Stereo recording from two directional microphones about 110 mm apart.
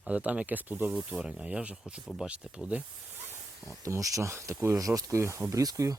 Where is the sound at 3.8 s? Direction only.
30° right (ahead or behind).